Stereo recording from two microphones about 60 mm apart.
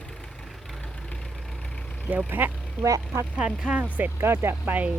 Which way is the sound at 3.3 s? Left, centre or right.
Centre.